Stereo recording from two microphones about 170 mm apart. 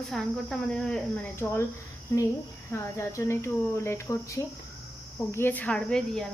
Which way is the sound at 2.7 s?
15° left (ahead or behind).